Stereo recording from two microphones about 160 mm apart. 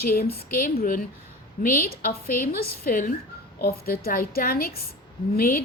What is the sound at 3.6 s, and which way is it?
A woman's voice, 75° left (ahead or behind).